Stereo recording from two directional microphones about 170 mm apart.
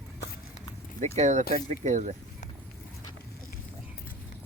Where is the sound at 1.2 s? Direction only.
45° right (ahead or behind).